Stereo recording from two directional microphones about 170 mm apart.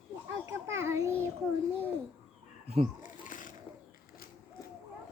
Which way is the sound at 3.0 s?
50° left (ahead or behind).